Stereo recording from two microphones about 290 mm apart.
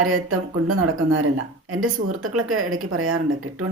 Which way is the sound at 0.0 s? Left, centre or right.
Right.